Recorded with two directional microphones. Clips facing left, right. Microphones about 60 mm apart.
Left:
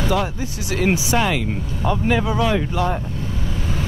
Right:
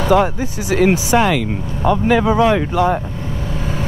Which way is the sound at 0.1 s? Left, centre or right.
Right.